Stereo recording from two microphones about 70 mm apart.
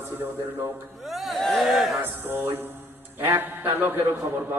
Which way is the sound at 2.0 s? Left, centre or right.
Right.